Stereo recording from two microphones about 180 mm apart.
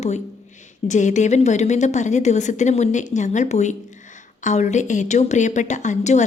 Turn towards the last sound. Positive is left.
turn(degrees=40)  # may be behind; listen again after turning